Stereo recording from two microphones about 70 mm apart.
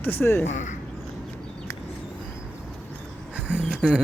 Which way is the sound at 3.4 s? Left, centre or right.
Right.